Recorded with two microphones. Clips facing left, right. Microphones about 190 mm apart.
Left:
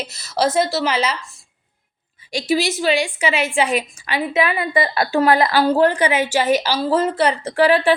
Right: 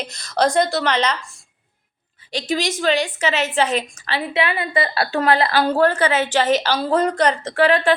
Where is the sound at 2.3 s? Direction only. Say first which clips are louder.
Left 3 dB; 10° left (ahead or behind).